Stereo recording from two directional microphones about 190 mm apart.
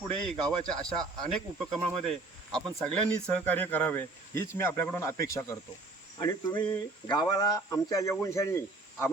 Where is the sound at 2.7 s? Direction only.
5° left (ahead or behind).